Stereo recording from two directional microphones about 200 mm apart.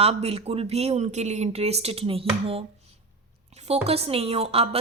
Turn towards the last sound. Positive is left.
turn(degrees=-30)  # may be behind; listen again after turning